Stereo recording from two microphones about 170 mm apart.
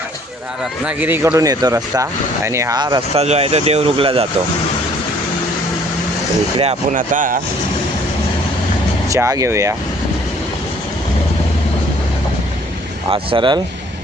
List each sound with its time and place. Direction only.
0.9 s speech: 10° right (ahead or behind); by 3.0 s 25° right (ahead or behind)
3.2 s speech: 35° right (ahead or behind)
6.9 s speech: 50° right (ahead or behind)
9.0 s speech: 20° right (ahead or behind)
13.1 s speech: 30° right (ahead or behind)